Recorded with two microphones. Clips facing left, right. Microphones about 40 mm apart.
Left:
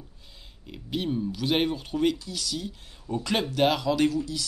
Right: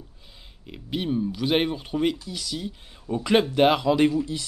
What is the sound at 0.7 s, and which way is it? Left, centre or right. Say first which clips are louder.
Speech: right 2 dB; centre.